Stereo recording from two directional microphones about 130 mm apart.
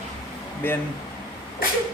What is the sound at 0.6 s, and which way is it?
Speech, 15° left (ahead or behind).